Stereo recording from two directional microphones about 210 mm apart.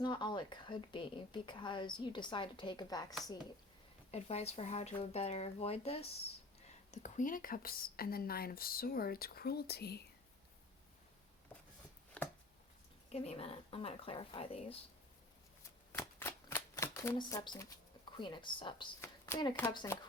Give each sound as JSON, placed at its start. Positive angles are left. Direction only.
{"t": 0.0, "sound": "a woman's voice", "side_deg": 20}
{"t": 4.1, "sound": "a woman's voice", "side_deg": 30}
{"t": 12.2, "sound": "chopping", "side_deg": 5}
{"t": 13.1, "sound": "a woman's voice", "side_deg": 30}
{"t": 15.9, "sound": "shuffling cards", "side_deg": 10}
{"t": 18.2, "sound": "a woman's voice", "side_deg": 20}
{"t": 19.0, "sound": "a sound", "side_deg": 10}
{"t": 19.7, "sound": "a woman's voice", "side_deg": 20}